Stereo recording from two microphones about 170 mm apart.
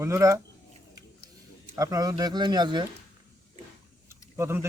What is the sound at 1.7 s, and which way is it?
Speech, 20° right (ahead or behind).